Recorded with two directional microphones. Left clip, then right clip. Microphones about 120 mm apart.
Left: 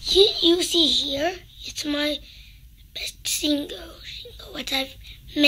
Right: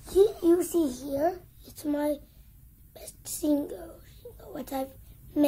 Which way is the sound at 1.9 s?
10° left (ahead or behind).